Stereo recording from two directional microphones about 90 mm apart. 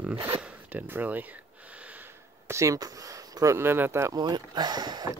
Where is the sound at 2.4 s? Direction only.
35° right (ahead or behind).